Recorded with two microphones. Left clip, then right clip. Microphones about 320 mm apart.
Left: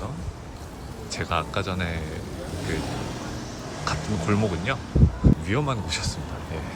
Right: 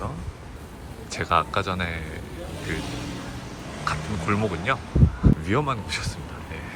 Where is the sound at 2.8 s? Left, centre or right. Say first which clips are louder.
Left 2 dB; left.